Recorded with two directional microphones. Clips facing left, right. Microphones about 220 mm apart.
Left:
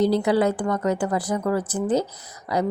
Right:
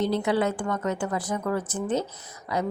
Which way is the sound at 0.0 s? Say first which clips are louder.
Left 5 dB; 35° left (ahead or behind).